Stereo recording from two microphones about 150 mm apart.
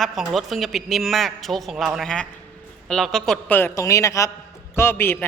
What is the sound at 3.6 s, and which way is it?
A man's voice, 20° left (ahead or behind).